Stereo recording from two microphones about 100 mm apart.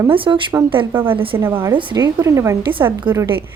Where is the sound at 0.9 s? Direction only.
20° right (ahead or behind).